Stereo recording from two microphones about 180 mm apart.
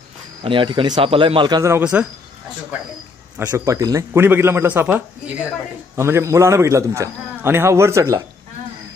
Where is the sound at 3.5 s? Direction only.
20° right (ahead or behind).